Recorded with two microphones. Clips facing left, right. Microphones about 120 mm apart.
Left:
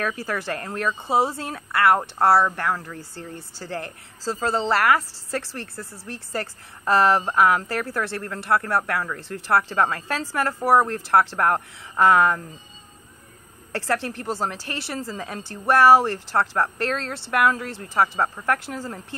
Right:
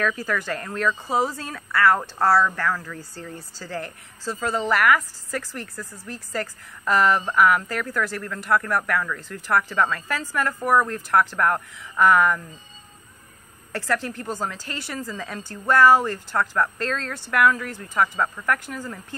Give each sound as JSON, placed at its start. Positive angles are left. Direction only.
{"t": 0.0, "sound": "a woman's voice", "side_deg": 25}
{"t": 13.7, "sound": "a woman's voice", "side_deg": 30}